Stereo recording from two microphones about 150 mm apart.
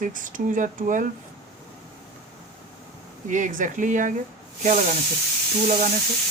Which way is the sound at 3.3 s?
60° right (ahead or behind).